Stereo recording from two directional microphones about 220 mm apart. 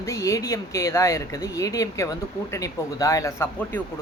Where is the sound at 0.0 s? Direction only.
15° left (ahead or behind).